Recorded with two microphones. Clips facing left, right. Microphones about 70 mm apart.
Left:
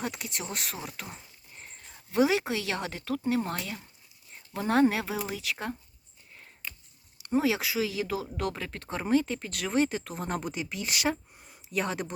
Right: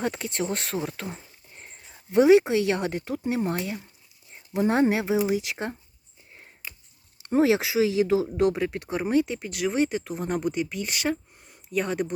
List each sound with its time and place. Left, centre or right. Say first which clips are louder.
0.0 s speech: right 7 dB; right
1.0 s a sound: right 7 dB; right
1.9 s speech: right 9 dB; right
7.2 s speech: right 6 dB; right; by 12.1 s centre